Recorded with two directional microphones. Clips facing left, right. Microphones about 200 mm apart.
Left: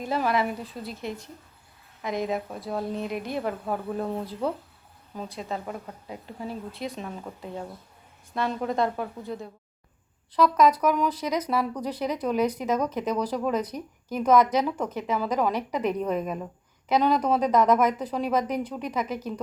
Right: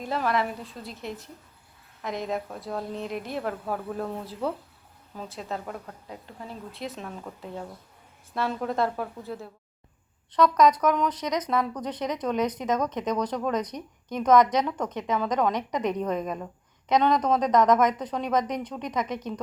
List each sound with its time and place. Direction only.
0.0 s a woman's voice: centre (ahead or behind)
6.7 s a woman's voice: centre (ahead or behind)